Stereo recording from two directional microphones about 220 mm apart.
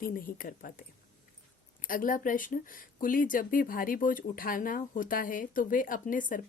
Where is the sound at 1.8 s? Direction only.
40° left (ahead or behind).